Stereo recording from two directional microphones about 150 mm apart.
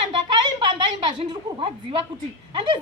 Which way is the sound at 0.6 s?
30° right (ahead or behind).